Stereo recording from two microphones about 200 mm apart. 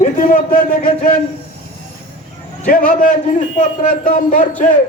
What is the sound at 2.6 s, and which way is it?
A man's voice, 40° left (ahead or behind).